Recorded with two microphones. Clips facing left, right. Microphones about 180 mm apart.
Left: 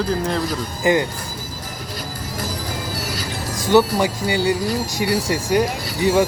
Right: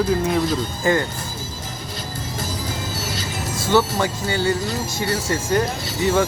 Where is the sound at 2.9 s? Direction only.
25° right (ahead or behind).